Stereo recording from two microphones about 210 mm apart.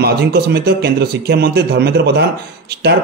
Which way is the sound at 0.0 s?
50° right (ahead or behind).